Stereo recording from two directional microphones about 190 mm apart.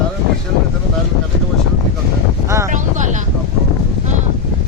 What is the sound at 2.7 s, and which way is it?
Vehicle, 40° right (ahead or behind).